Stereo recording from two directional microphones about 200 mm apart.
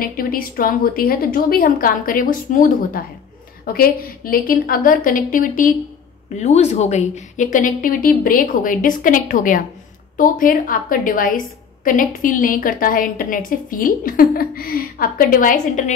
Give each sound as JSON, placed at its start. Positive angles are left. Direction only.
{"t": 0.0, "sound": "a woman's voice", "side_deg": 45}